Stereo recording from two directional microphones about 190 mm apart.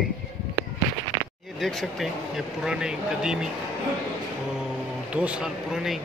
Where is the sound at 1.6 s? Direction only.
Centre (ahead or behind).